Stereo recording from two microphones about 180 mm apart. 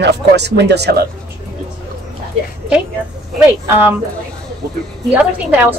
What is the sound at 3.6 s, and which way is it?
Speech, 10° right (ahead or behind).